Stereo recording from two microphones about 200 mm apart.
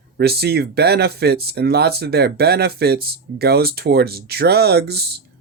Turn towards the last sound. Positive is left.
turn(degrees=-55)  # may be behind; listen again after turning